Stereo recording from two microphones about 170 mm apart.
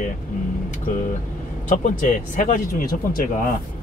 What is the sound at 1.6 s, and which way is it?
Speech, 50° left (ahead or behind).